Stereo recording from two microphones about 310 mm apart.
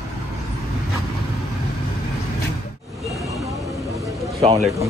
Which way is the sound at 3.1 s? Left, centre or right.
Centre.